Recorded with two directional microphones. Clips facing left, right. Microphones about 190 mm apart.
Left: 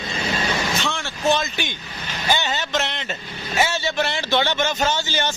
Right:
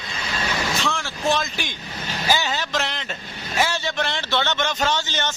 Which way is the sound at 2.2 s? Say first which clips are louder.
Even; centre (ahead or behind).